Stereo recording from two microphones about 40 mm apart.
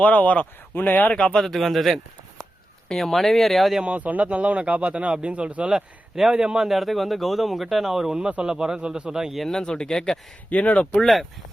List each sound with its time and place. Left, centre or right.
0.0 s speech: left
1.1 s speech: left
1.4 s speech: centre
3.8 s speech: right
5.7 s a man's voice: centre
6.7 s a man's voice: centre
9.5 s speech: centre
10.5 s speech: left
11.0 s speech: centre